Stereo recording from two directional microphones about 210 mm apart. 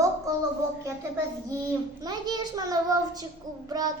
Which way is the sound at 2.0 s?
20° right (ahead or behind).